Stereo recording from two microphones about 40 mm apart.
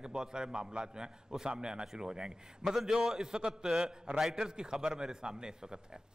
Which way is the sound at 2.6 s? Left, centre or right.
Centre.